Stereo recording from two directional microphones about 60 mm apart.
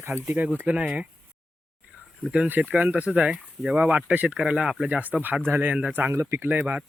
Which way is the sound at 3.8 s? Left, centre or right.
Right.